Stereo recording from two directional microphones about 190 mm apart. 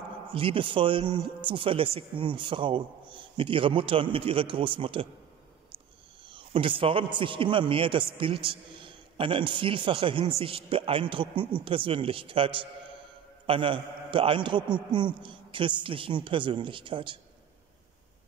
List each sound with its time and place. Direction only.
0.3 s speech: 30° right (ahead or behind)
6.2 s a sound: 25° right (ahead or behind)
7.2 s speech: 25° right (ahead or behind)